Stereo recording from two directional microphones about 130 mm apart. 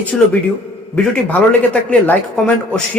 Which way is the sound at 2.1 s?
10° left (ahead or behind).